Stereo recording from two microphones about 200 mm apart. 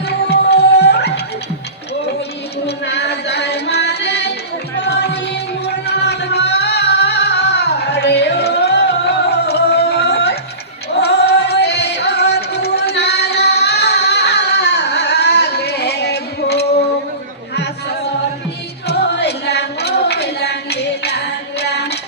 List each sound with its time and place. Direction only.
0.3 s music: 55° left (ahead or behind)
2.6 s music: 60° left (ahead or behind)
18.9 s a sound: 55° left (ahead or behind)